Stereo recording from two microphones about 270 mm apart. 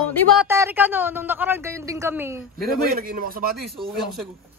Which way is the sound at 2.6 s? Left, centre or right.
Right.